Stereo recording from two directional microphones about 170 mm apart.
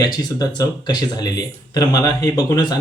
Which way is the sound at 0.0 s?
25° left (ahead or behind).